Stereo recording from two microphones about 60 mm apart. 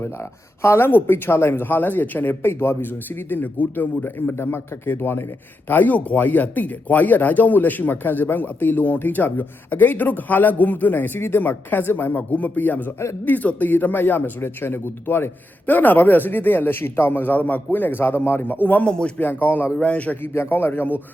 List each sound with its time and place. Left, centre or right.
0.0 s speech: left
18.9 s speech: centre
19.2 s speech: left
20.2 s speech: left